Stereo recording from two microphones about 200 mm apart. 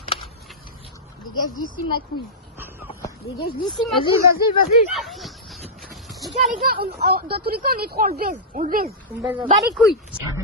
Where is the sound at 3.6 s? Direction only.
Centre (ahead or behind).